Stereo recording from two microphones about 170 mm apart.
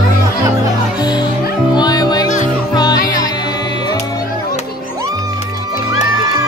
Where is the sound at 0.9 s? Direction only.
25° left (ahead or behind).